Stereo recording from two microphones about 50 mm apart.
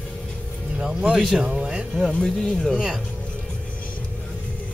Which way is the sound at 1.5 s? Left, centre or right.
Centre.